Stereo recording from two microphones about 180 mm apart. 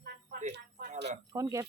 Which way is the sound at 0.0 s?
55° right (ahead or behind).